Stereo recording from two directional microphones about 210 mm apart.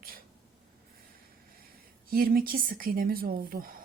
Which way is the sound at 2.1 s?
45° right (ahead or behind).